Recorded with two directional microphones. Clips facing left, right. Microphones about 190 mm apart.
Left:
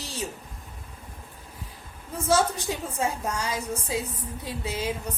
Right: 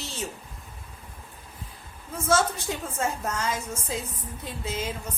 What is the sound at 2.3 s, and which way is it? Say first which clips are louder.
A woman's voice: left 1 dB; 15° left (ahead or behind).